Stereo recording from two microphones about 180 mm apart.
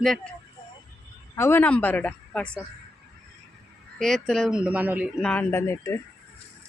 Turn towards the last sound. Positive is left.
turn(degrees=15)  # may be behind; listen again after turning